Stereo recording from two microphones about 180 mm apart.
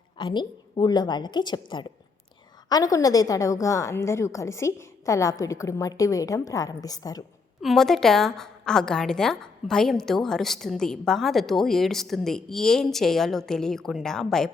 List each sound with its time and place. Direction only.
0.2 s a woman's voice: 25° left (ahead or behind)
7.6 s a woman's voice: centre (ahead or behind)